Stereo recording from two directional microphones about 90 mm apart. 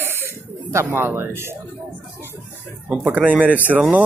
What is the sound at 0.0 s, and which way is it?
Bird, 25° right (ahead or behind).